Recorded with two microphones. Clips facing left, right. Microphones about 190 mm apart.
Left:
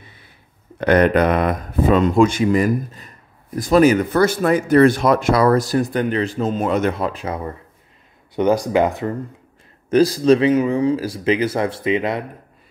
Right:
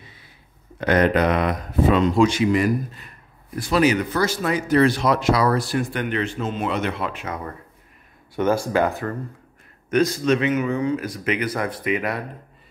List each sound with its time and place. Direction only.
0.7 s speech: 60° left (ahead or behind); by 7.5 s 30° left (ahead or behind)
8.4 s speech: 15° left (ahead or behind)
9.8 s speech: 35° left (ahead or behind)